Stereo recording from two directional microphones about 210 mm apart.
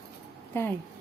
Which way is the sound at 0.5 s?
10° left (ahead or behind).